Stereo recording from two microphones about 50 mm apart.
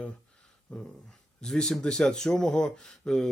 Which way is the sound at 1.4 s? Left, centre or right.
Centre.